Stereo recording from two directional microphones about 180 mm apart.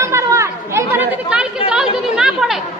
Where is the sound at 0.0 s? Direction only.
15° right (ahead or behind).